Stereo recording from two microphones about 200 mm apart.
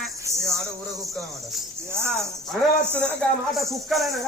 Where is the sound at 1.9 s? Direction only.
10° right (ahead or behind).